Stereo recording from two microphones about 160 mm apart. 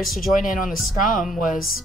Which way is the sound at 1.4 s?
65° left (ahead or behind).